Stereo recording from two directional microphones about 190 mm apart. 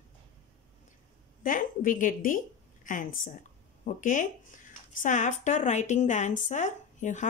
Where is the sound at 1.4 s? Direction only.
45° left (ahead or behind).